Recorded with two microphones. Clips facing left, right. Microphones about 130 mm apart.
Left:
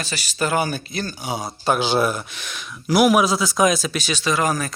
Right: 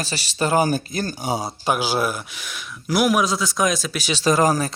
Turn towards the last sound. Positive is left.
turn(degrees=-30)  # may be behind; listen again after turning